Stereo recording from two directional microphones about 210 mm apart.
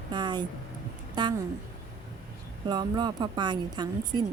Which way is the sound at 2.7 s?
20° right (ahead or behind).